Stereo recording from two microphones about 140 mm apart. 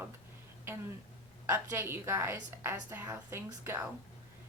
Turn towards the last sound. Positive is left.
turn(degrees=-20)  # may be behind; listen again after turning